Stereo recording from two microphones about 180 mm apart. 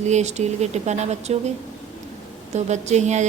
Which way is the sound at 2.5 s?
40° right (ahead or behind).